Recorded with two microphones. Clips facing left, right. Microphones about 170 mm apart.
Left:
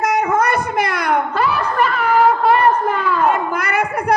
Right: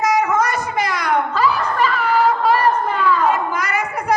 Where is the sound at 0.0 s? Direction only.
60° left (ahead or behind).